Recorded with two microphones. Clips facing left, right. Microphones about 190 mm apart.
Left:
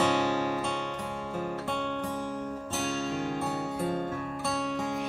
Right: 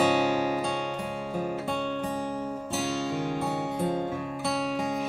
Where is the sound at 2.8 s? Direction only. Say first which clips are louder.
Right 2 dB; centre (ahead or behind).